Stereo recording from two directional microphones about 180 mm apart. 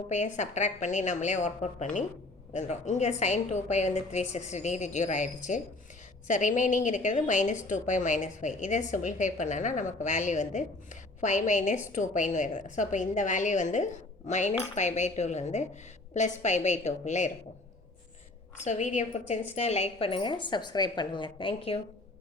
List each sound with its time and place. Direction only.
0.1 s a woman's voice: 40° left (ahead or behind)
18.6 s a woman's voice: 40° left (ahead or behind)